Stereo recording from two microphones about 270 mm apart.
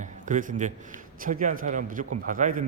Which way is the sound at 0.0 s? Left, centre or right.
Right.